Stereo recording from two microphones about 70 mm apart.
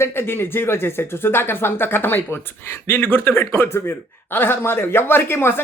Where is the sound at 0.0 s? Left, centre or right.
Left.